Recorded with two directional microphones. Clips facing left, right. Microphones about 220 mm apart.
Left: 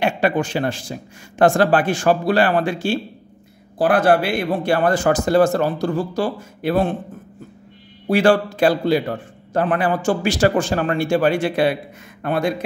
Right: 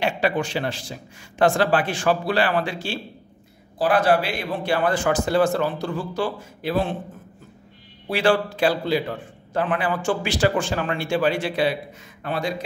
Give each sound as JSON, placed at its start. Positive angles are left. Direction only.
{"t": 0.0, "sound": "a man's voice", "side_deg": 50}
{"t": 8.1, "sound": "a man's voice", "side_deg": 45}